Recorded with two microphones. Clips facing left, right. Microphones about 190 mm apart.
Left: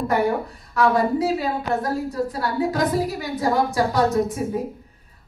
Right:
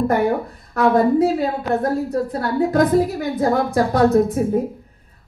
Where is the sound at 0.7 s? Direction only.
55° right (ahead or behind).